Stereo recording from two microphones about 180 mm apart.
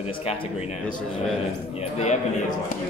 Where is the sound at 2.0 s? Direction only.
40° left (ahead or behind).